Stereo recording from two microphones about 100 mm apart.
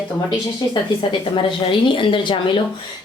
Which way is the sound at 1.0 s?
55° left (ahead or behind).